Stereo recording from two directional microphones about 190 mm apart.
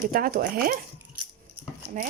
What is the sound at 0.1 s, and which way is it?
Speech, 50° right (ahead or behind).